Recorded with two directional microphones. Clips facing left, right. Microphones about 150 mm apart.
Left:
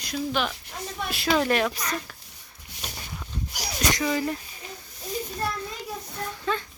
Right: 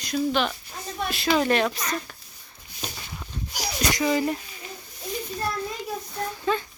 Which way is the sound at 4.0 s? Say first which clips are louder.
Right 5 dB; 20° right (ahead or behind).